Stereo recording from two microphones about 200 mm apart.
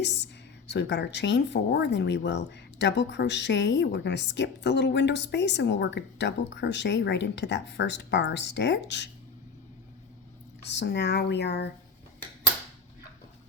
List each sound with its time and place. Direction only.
0.7 s speech: 60° left (ahead or behind)
10.6 s speech: 60° left (ahead or behind)